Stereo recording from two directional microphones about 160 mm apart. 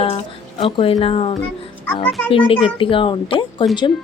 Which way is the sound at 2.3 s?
35° left (ahead or behind).